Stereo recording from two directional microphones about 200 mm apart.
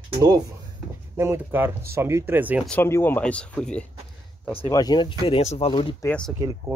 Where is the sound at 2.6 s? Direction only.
10° left (ahead or behind).